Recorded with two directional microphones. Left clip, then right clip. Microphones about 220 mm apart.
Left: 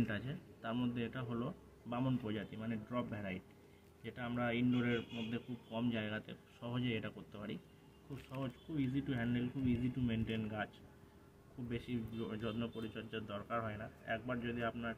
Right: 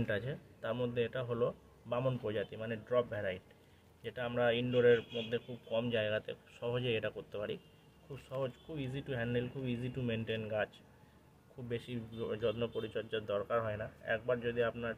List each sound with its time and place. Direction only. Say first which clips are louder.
0.0 s speech: right 5 dB; 55° right (ahead or behind)
11.7 s speech: right 3 dB; 55° right (ahead or behind)